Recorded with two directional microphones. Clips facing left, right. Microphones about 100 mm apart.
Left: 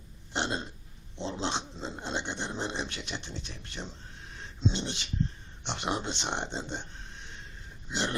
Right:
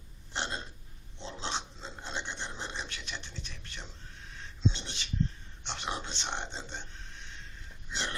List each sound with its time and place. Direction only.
0.3 s a sound: 20° left (ahead or behind)
4.4 s dog: 20° left (ahead or behind)
5.6 s speech: 20° left (ahead or behind)
7.9 s dog: 15° left (ahead or behind)